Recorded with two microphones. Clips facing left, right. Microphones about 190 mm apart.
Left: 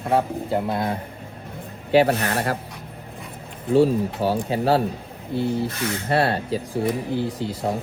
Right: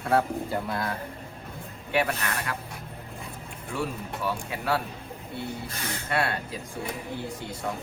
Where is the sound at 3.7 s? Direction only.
30° left (ahead or behind).